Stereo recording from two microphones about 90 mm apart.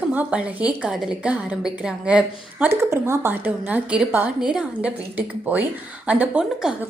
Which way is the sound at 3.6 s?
15° right (ahead or behind).